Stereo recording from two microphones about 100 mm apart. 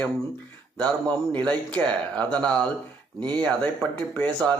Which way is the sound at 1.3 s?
10° left (ahead or behind).